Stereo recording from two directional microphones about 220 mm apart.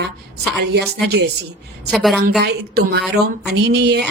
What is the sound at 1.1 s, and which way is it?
Speech, 50° right (ahead or behind).